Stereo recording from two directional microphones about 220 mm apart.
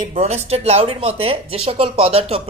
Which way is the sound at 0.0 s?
30° right (ahead or behind).